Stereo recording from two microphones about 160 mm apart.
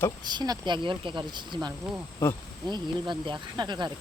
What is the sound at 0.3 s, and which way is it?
Speech, 25° right (ahead or behind).